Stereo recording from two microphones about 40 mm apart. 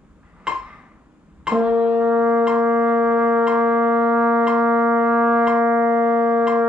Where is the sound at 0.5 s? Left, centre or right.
Centre.